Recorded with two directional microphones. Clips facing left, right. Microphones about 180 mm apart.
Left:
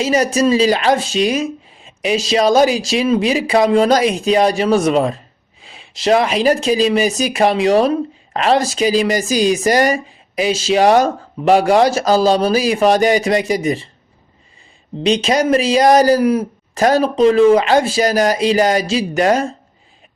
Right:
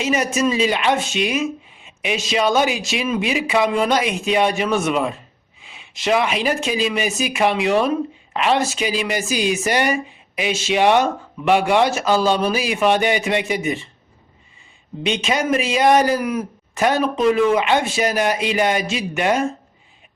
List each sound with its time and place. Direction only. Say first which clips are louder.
0.0 s speech: left 5 dB; 35° left (ahead or behind)
15.0 s speech: left 6 dB; 35° left (ahead or behind)